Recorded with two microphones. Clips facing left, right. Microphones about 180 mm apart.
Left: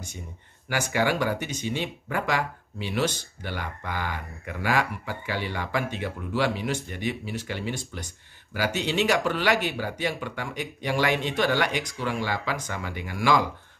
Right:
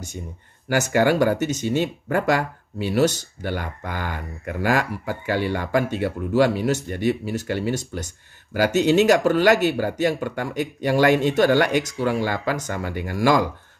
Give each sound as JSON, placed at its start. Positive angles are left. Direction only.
{"t": 0.7, "sound": "speech", "side_deg": -45}